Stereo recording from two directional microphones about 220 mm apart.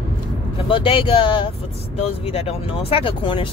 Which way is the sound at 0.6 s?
25° left (ahead or behind).